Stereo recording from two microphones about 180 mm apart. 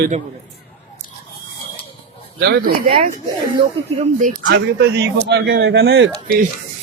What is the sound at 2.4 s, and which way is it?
Speech, 60° right (ahead or behind).